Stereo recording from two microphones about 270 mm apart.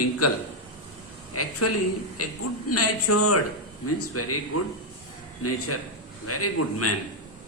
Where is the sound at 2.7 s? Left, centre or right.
Left.